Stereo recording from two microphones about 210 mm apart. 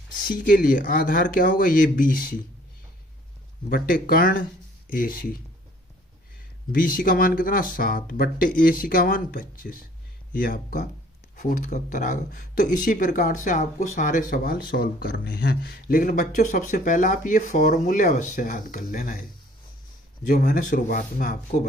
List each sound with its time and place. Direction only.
0.1 s speech: 40° left (ahead or behind)
3.7 s speech: 45° left (ahead or behind)
6.7 s speech: 40° left (ahead or behind)
20.2 s speech: 40° left (ahead or behind)